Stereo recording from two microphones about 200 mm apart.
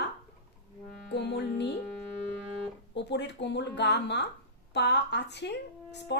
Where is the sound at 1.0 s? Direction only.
55° left (ahead or behind).